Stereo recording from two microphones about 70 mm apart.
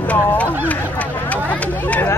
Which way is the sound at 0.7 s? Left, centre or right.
Left.